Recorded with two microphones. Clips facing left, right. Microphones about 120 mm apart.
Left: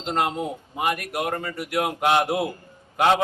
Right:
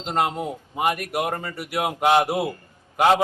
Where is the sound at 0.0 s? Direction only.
5° right (ahead or behind).